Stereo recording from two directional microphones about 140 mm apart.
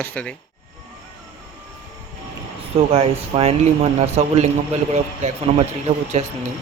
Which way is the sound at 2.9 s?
45° right (ahead or behind).